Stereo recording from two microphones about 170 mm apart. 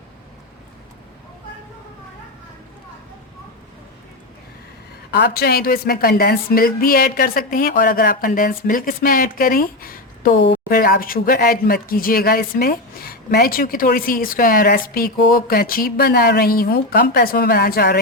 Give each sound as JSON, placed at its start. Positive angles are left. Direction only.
{"t": 5.1, "sound": "speech", "side_deg": 70}
{"t": 10.7, "sound": "speech", "side_deg": 60}